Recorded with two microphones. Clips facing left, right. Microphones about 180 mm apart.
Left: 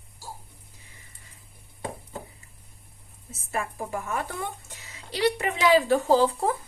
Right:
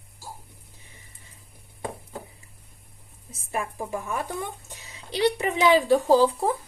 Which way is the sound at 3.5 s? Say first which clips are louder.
Right 1 dB; 15° right (ahead or behind).